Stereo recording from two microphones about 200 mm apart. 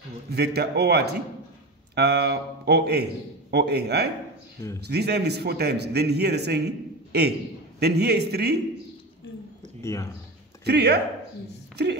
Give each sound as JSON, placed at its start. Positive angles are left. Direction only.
{"t": 0.3, "sound": "a man's voice", "side_deg": -55}
{"t": 9.8, "sound": "speech", "side_deg": 15}
{"t": 10.6, "sound": "speech", "side_deg": -55}